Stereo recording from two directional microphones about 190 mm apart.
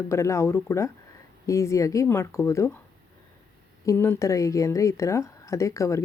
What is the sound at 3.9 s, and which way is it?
Speech, 10° left (ahead or behind).